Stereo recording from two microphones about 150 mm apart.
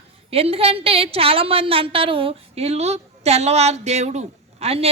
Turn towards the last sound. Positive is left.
turn(degrees=-40)  # may be behind; listen again after turning